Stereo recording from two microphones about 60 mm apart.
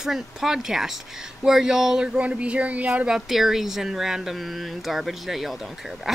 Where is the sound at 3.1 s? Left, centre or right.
Centre.